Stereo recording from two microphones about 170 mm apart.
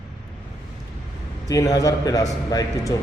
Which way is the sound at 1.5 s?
20° left (ahead or behind).